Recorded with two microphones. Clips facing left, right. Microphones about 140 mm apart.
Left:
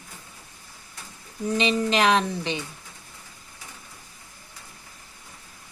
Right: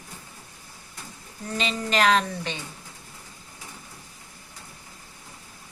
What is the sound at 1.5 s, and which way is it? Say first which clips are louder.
Speech: left 3 dB; 20° left (ahead or behind).